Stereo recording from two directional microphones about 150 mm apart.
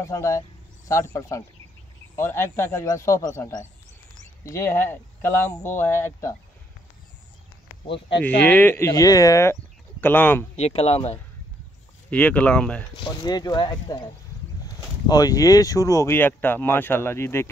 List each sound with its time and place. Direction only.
0.0 s a man's voice: 20° left (ahead or behind)
8.2 s speech: 10° left (ahead or behind)
10.5 s speech: 45° left (ahead or behind)
12.1 s speech: 10° left (ahead or behind)
12.9 s a man's voice: 30° left (ahead or behind)